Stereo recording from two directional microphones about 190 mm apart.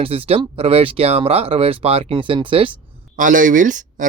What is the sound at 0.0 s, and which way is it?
Speech, 30° right (ahead or behind).